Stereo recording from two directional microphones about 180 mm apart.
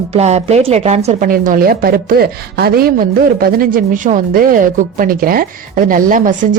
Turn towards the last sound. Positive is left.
turn(degrees=-45)  # may be behind; listen again after turning